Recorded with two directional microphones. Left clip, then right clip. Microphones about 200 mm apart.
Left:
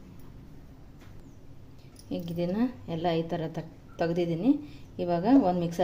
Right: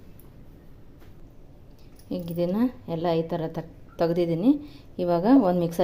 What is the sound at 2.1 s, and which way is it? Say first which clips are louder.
A woman's voice: right 4 dB; 15° right (ahead or behind).